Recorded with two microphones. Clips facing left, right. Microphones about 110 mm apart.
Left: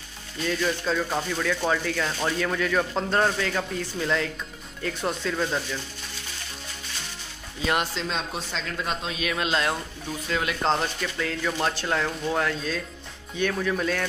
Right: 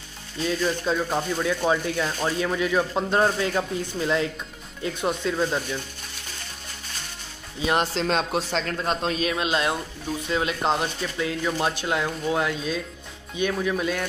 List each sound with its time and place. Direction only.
0.7 s speech: 15° right (ahead or behind)
7.7 s speech: 35° right (ahead or behind)
8.1 s speech: 60° right (ahead or behind)
8.5 s speech: 45° right (ahead or behind)
9.3 s speech: 20° right (ahead or behind)